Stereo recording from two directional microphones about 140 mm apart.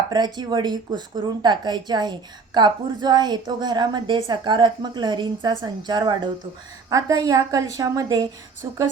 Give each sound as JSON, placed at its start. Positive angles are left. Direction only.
{"t": 0.1, "sound": "a woman's voice", "side_deg": -30}